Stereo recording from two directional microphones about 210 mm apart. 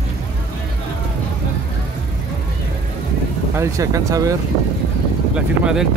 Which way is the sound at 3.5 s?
15° right (ahead or behind).